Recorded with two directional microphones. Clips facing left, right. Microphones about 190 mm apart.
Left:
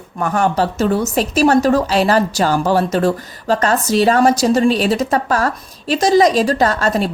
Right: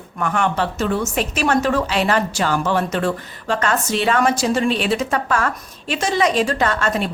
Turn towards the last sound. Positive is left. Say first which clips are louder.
# left 4 dB
turn(degrees=35)  # may be behind; listen again after turning